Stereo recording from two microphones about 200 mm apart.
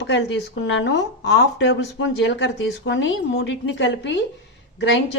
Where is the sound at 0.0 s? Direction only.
60° left (ahead or behind).